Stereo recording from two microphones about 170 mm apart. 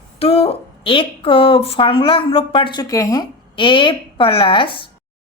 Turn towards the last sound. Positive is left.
turn(degrees=30)  # may be behind; listen again after turning